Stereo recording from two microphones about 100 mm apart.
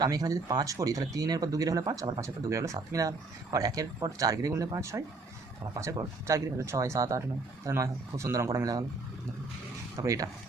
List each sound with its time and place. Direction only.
0.0 s speech: 40° right (ahead or behind)
2.2 s speech: 30° right (ahead or behind)
10.0 s speech: 35° right (ahead or behind)